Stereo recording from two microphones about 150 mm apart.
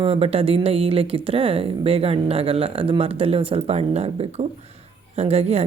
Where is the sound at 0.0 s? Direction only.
40° right (ahead or behind).